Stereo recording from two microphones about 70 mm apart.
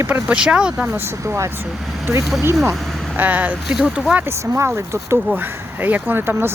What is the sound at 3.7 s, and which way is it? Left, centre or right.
Speech, centre.